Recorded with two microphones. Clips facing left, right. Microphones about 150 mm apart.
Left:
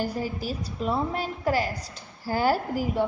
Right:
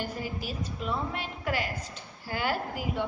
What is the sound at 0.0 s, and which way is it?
A woman's voice, 40° left (ahead or behind).